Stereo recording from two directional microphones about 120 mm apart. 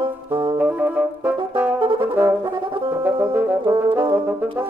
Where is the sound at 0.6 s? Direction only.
15° right (ahead or behind).